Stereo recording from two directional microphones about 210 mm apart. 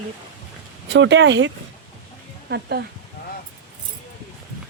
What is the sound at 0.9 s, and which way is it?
Speech, 60° right (ahead or behind).